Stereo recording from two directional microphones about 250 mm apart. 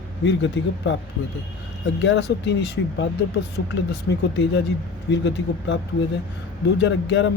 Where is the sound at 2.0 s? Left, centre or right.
Left.